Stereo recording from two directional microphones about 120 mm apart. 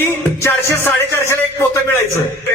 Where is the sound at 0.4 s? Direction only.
20° left (ahead or behind).